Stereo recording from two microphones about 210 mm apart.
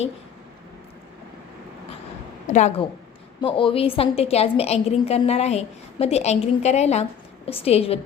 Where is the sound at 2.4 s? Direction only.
35° left (ahead or behind).